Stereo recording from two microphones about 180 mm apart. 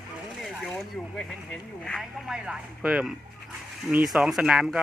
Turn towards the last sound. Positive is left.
turn(degrees=-5)  # may be behind; listen again after turning